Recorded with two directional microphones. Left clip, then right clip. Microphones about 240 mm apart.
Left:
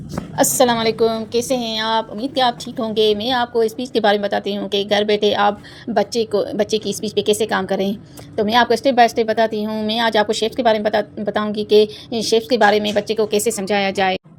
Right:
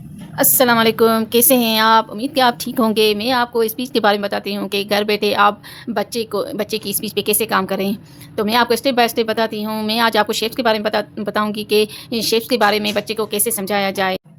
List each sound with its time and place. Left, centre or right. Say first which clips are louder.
0.5 s speech: right 2 dB; centre
0.8 s speech: right 3 dB; right; by 14.2 s centre